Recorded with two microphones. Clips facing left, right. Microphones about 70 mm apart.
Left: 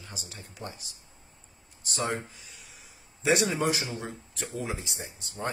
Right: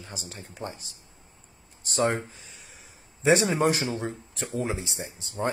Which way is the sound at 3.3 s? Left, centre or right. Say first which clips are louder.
Right 4 dB; right.